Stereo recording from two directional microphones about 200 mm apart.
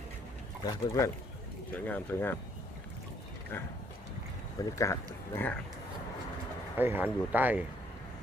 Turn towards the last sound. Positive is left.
turn(degrees=-10)  # may be behind; listen again after turning